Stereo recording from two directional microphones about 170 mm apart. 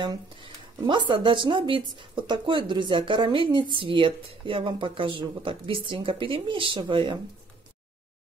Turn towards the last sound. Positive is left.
turn(degrees=-30)  # may be behind; listen again after turning